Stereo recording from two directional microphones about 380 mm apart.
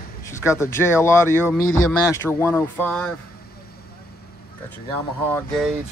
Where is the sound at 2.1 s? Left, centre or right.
Centre.